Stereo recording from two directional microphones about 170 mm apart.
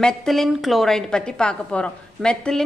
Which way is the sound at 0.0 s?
Centre (ahead or behind).